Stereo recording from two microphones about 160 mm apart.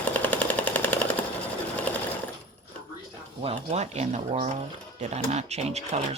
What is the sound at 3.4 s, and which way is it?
Speech, 40° right (ahead or behind).